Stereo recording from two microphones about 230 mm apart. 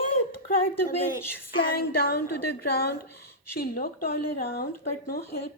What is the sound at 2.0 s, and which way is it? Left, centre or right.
Speech, left.